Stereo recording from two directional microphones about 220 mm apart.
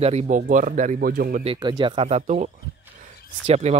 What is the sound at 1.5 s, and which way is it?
Speech, 20° right (ahead or behind).